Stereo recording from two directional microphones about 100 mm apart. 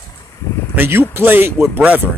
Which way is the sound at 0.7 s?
20° right (ahead or behind).